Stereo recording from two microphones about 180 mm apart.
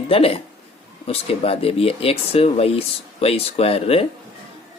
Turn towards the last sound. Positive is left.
turn(degrees=35)  # may be behind; listen again after turning